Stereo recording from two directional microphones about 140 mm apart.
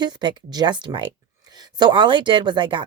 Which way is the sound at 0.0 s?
30° right (ahead or behind).